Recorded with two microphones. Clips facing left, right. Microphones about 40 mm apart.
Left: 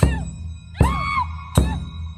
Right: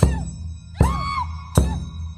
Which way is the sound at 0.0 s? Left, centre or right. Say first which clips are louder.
Even; left.